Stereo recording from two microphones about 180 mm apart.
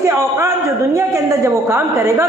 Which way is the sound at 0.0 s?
15° right (ahead or behind).